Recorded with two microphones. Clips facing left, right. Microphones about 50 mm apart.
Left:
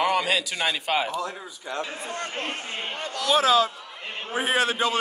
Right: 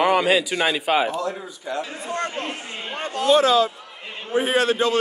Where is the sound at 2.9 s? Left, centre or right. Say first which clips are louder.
Right 9 dB; right.